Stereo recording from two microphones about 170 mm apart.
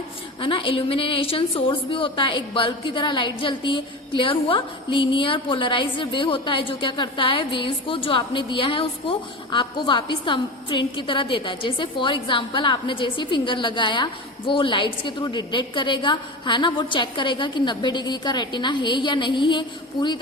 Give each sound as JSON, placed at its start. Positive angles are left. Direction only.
{"t": 0.3, "sound": "a woman's voice", "side_deg": 30}